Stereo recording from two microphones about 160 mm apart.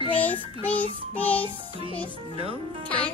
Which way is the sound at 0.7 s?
10° left (ahead or behind).